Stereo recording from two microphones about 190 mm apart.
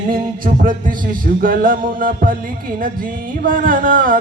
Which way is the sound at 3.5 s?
45° right (ahead or behind).